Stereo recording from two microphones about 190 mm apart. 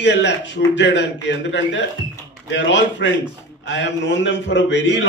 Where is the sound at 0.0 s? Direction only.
70° left (ahead or behind).